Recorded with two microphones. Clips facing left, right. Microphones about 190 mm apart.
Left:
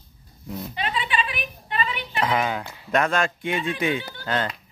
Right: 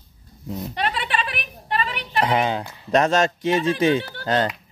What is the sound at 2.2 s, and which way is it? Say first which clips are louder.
A woman's voice: right 3 dB; 30° right (ahead or behind).